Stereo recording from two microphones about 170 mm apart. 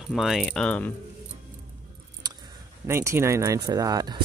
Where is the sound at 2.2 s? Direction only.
25° right (ahead or behind).